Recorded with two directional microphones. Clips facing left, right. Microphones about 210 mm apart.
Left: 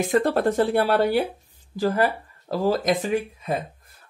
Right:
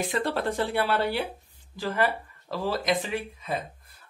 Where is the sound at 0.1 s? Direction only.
45° left (ahead or behind).